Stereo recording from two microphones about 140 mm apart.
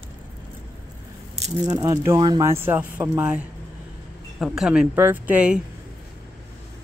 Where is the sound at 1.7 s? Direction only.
25° right (ahead or behind).